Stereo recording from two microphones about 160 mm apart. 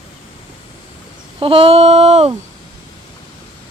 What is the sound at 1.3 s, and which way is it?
Speech, 35° right (ahead or behind).